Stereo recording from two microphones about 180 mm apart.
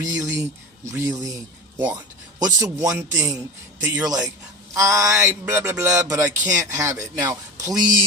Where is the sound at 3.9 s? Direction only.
20° right (ahead or behind).